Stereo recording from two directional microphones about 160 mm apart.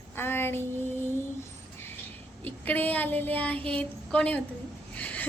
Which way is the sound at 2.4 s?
10° left (ahead or behind).